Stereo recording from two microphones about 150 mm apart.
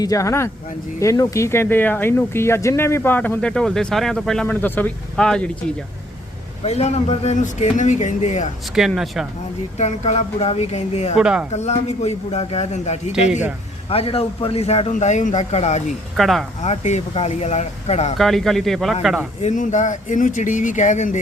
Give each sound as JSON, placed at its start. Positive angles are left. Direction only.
{"t": 0.0, "sound": "speech", "side_deg": 20}
{"t": 6.7, "sound": "a man's voice", "side_deg": 45}
{"t": 8.7, "sound": "speech", "side_deg": -5}
{"t": 9.7, "sound": "a man's voice", "side_deg": 50}
{"t": 11.2, "sound": "speech", "side_deg": -5}
{"t": 11.5, "sound": "a man's voice", "side_deg": 45}
{"t": 16.1, "sound": "speech", "side_deg": 0}
{"t": 16.6, "sound": "a man's voice", "side_deg": 50}
{"t": 18.2, "sound": "speech", "side_deg": 0}
{"t": 19.4, "sound": "speech", "side_deg": 55}